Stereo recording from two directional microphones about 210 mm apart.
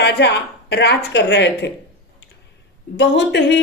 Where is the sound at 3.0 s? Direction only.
55° left (ahead or behind).